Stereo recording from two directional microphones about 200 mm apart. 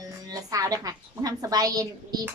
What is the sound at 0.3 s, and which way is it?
A woman's voice, 20° right (ahead or behind).